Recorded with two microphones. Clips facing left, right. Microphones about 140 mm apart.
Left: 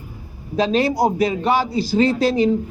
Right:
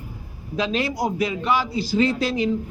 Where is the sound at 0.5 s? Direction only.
35° left (ahead or behind).